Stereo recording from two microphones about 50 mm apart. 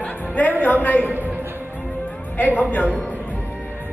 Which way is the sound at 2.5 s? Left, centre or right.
Left.